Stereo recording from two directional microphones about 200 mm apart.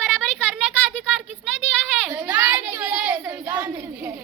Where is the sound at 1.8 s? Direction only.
Centre (ahead or behind).